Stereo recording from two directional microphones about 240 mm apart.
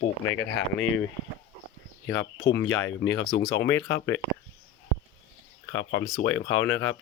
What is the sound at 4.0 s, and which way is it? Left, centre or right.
Speech, centre.